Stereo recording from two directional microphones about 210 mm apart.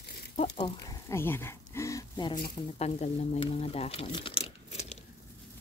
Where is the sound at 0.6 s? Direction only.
15° left (ahead or behind).